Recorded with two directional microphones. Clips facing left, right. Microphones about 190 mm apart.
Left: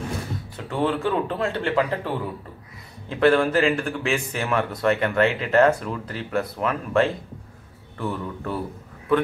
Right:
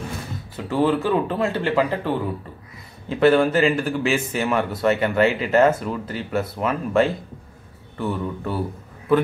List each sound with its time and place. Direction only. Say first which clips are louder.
0.7 s speech: right 4 dB; 5° right (ahead or behind)